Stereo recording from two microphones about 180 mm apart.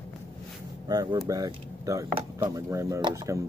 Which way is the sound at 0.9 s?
20° right (ahead or behind).